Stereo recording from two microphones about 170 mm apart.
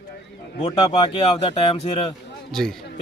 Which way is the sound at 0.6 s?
30° left (ahead or behind).